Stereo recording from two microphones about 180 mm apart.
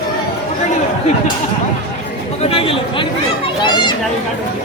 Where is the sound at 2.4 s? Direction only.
30° left (ahead or behind).